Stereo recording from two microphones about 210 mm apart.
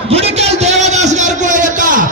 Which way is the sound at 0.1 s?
30° right (ahead or behind).